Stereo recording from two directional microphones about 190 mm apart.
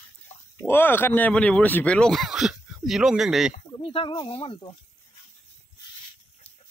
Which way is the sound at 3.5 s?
30° left (ahead or behind).